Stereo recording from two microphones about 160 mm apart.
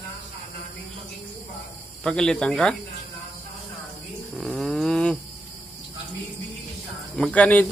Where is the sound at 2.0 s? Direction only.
5° left (ahead or behind).